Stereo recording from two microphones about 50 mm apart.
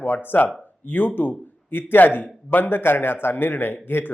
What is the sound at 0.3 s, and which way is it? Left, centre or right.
A man's voice, left.